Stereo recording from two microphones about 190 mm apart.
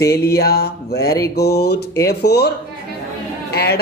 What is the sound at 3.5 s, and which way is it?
Speech, 55° left (ahead or behind).